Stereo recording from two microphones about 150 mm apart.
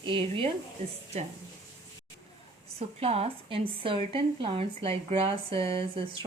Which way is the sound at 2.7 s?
40° right (ahead or behind).